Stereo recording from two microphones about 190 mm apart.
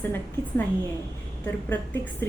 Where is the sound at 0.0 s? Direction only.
10° left (ahead or behind).